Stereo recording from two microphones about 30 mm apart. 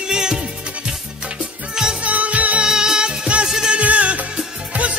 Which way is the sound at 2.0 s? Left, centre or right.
Right.